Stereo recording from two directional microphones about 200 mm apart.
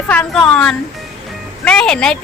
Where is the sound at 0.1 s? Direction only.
5° left (ahead or behind).